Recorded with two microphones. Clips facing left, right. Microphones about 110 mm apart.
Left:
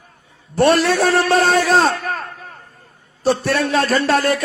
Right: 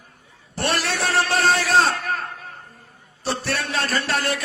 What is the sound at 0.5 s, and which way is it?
A man's voice, 55° left (ahead or behind).